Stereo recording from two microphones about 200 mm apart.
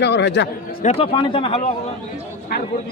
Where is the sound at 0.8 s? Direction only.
30° left (ahead or behind).